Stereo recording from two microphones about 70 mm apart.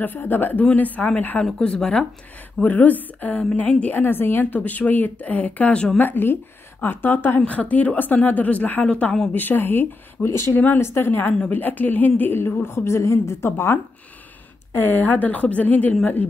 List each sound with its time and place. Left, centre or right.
0.0 s a woman's voice: left
1.4 s speech: centre
2.6 s a woman's voice: left
5.9 s a woman's voice: left